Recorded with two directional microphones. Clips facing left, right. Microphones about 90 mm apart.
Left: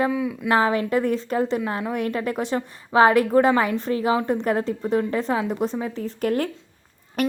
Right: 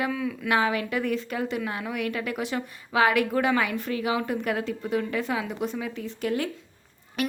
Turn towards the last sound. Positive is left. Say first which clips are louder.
# left 5 dB
turn(degrees=45)  # may be behind; listen again after turning